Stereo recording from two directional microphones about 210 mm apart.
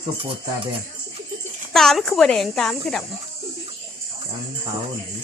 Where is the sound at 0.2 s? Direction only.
25° right (ahead or behind).